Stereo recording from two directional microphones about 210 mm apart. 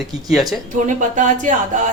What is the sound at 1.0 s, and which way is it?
Speech, 35° right (ahead or behind).